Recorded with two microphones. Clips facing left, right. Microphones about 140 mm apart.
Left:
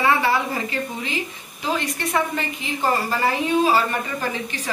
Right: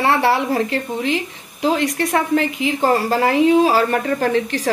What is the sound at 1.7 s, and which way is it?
A woman's voice, 90° right.